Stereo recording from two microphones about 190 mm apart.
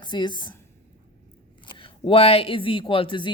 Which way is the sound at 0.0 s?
25° left (ahead or behind).